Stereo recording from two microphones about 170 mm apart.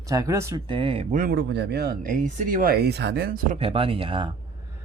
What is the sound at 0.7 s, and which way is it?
Speech, 30° right (ahead or behind).